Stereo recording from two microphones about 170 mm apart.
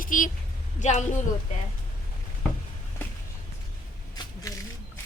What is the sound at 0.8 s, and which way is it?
Speech, 40° left (ahead or behind).